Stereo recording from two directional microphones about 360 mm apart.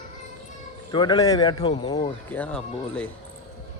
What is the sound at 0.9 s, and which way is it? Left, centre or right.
Speech, centre.